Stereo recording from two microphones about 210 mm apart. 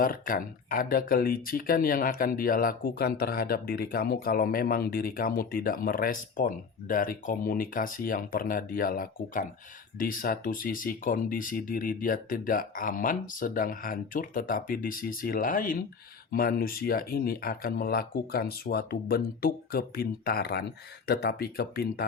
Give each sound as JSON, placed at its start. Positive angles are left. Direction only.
{"t": 0.0, "sound": "speech", "side_deg": 40}